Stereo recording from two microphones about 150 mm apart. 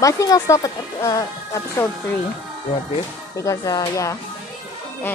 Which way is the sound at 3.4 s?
25° left (ahead or behind).